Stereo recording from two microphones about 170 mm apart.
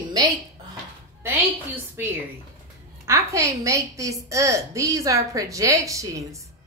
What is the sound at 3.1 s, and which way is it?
A woman's voice, 15° right (ahead or behind).